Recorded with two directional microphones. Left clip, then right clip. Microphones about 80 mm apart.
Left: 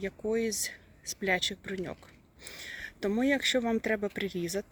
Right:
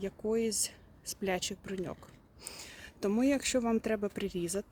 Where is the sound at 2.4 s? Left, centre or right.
Right.